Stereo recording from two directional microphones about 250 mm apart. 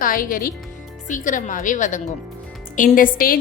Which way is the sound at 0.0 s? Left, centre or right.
Left.